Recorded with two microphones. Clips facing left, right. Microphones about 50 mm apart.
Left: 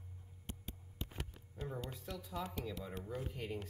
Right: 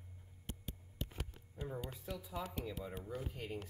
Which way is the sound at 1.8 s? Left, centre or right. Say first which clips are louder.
Even; centre.